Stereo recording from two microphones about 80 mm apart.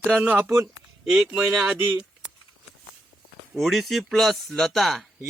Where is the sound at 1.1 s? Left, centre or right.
Centre.